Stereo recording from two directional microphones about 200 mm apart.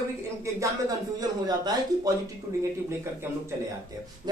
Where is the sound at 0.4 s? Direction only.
15° right (ahead or behind).